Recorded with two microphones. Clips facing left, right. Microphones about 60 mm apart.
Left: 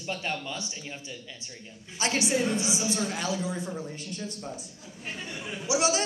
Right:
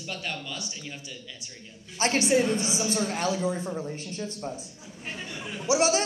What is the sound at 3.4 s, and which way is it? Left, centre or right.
Speech, right.